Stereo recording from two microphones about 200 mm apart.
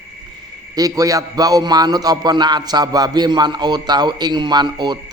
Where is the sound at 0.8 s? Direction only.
15° right (ahead or behind).